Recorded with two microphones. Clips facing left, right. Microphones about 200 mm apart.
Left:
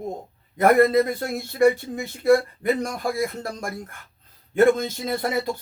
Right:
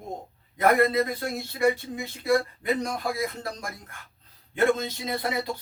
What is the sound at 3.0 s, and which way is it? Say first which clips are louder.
Speech: left 4 dB; 50° left (ahead or behind).